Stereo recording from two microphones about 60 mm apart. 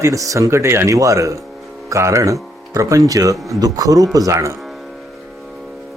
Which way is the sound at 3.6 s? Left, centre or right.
Right.